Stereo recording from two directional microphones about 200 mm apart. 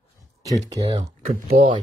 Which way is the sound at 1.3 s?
45° right (ahead or behind).